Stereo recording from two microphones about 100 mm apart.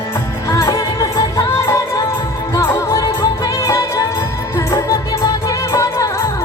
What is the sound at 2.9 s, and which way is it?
Music, 35° left (ahead or behind).